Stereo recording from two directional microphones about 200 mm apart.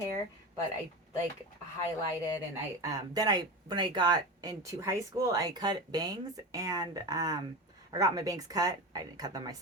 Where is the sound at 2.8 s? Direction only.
20° right (ahead or behind).